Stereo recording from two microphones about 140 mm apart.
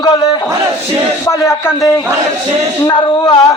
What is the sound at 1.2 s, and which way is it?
Speech, 20° left (ahead or behind).